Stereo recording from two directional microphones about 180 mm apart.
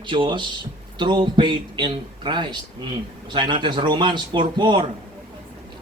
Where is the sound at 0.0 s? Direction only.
25° right (ahead or behind).